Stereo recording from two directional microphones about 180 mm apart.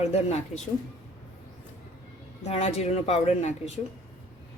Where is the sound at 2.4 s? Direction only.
35° left (ahead or behind).